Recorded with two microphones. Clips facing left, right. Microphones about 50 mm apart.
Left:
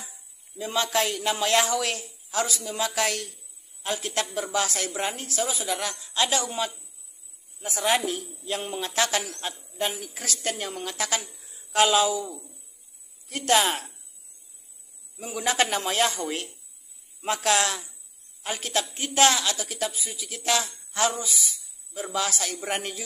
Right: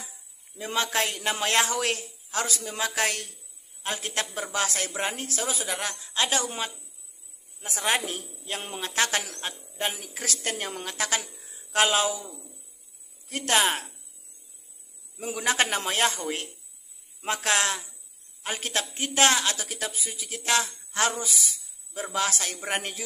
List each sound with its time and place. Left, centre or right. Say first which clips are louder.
0.6 s a man's voice: left 2 dB; right
7.7 s a man's voice: left 2 dB; right
10.2 s a man's voice: even; right
13.3 s a man's voice: left 2 dB; right
15.4 s a man's voice: left 1 dB; right
17.2 s a man's voice: left 2 dB; right
22.1 s a man's voice: even; right